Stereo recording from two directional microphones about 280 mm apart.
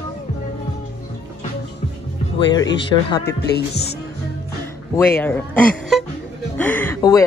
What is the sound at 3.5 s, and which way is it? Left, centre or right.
Music, left.